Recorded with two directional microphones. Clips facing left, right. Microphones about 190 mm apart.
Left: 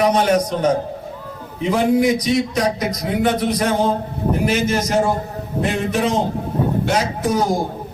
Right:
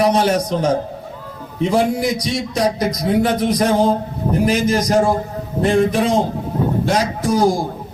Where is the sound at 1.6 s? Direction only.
35° right (ahead or behind).